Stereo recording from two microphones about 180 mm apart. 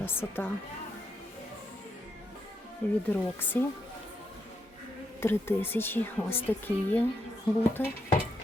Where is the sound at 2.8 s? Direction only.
5° left (ahead or behind).